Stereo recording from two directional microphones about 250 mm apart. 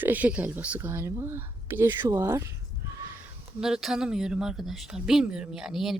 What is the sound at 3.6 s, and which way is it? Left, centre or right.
Speech, centre.